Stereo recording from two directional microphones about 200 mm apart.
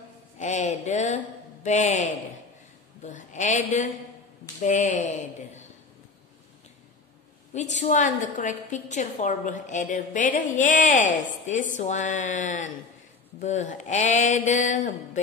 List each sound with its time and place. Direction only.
0.4 s a sound: 35° left (ahead or behind)
4.6 s a woman's voice: 35° left (ahead or behind)
7.5 s a woman's voice: 35° left (ahead or behind)